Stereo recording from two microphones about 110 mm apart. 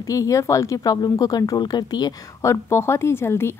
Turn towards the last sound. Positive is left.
turn(degrees=25)  # may be behind; listen again after turning